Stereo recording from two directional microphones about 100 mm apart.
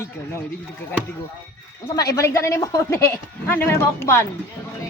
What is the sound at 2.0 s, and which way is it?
A woman's voice, 35° left (ahead or behind).